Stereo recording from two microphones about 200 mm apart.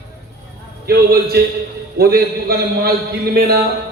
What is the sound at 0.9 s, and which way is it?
A man's voice, 50° right (ahead or behind).